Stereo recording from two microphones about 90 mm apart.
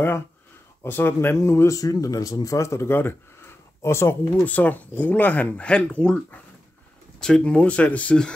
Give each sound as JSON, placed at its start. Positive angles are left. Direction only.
{"t": 0.8, "sound": "speech", "side_deg": 25}
{"t": 4.4, "sound": "speech", "side_deg": 15}